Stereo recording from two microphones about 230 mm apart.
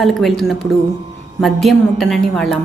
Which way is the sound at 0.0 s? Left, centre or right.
Centre.